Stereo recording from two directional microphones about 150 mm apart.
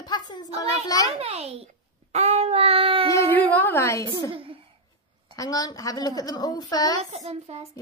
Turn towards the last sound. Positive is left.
turn(degrees=-45)  # may be behind; listen again after turning